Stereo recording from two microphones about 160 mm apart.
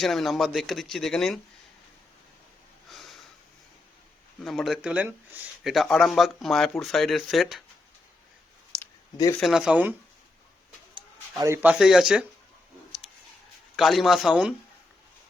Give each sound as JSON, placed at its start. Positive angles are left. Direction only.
{"t": 0.0, "sound": "speech", "side_deg": 0}
{"t": 2.9, "sound": "sniff", "side_deg": 0}
{"t": 4.4, "sound": "speech", "side_deg": 0}
{"t": 5.6, "sound": "speech", "side_deg": 0}
{"t": 8.7, "sound": "a sound", "side_deg": 5}
{"t": 9.4, "sound": "speech", "side_deg": -5}
{"t": 11.3, "sound": "speech", "side_deg": -15}
{"t": 13.7, "sound": "speech", "side_deg": 0}